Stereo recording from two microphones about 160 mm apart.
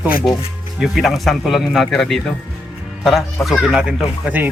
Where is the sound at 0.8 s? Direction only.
Centre (ahead or behind).